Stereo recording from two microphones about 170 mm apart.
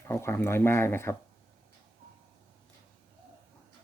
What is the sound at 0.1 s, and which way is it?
Speech, 15° left (ahead or behind).